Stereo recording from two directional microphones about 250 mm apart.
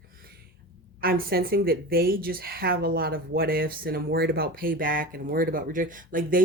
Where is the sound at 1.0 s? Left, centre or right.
Right.